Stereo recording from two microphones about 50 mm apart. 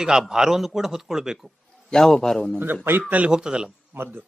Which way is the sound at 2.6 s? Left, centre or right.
Right.